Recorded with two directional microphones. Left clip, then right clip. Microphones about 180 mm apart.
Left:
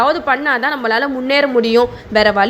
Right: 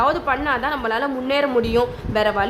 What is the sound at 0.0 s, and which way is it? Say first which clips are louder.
A woman's voice: left 5 dB; 20° left (ahead or behind).